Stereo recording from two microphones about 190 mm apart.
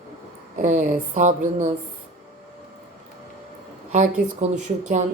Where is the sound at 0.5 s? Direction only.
40° right (ahead or behind).